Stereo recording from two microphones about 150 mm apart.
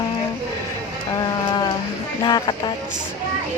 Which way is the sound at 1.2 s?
30° left (ahead or behind).